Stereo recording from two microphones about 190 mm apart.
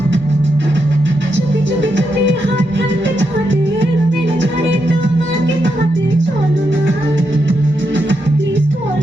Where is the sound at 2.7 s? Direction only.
70° right (ahead or behind).